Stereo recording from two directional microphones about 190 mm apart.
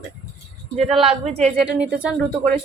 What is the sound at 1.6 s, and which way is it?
Speech, 5° right (ahead or behind).